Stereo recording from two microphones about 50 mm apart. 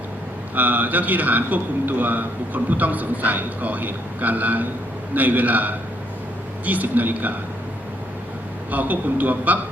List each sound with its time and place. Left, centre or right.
0.5 s a man's voice: right
8.7 s a man's voice: right